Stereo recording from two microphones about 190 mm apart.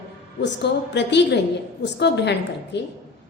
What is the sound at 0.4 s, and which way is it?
A woman's voice, 65° left (ahead or behind).